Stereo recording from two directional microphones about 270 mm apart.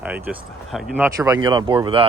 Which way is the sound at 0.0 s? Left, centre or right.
Centre.